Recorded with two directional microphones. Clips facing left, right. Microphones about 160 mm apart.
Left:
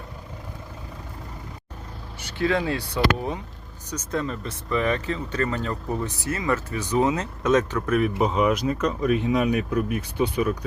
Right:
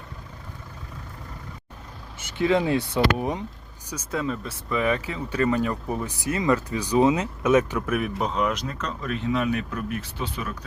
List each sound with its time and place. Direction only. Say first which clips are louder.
2.1 s speech: right 2 dB; 20° right (ahead or behind)
3.8 s speech: even; 5° right (ahead or behind)
8.2 s speech: left 4 dB; 5° left (ahead or behind)